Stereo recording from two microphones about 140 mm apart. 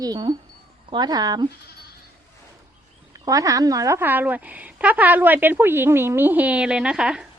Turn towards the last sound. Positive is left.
turn(degrees=-5)  # may be behind; listen again after turning